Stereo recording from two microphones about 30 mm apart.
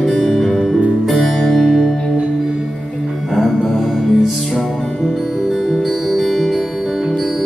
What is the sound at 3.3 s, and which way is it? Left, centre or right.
Music, centre.